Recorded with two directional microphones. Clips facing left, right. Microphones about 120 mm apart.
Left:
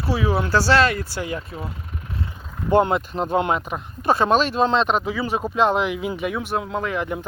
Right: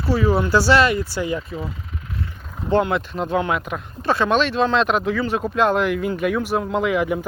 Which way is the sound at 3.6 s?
10° left (ahead or behind).